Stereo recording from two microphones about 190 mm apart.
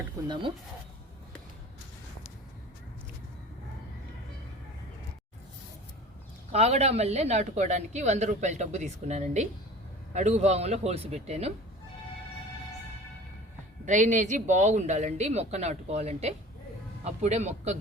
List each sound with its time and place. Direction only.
6.5 s a woman's voice: 35° right (ahead or behind)
13.8 s a woman's voice: 40° right (ahead or behind)